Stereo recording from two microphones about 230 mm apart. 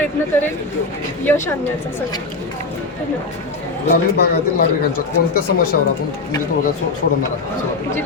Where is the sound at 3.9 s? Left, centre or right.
Left.